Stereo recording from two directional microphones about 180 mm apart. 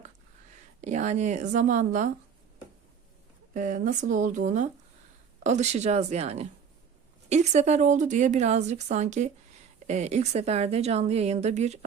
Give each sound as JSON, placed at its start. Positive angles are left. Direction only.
{"t": 0.8, "sound": "a woman's voice", "side_deg": -40}
{"t": 3.5, "sound": "a woman's voice", "side_deg": -45}